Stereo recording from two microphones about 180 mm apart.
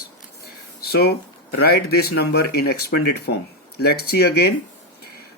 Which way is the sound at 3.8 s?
60° left (ahead or behind).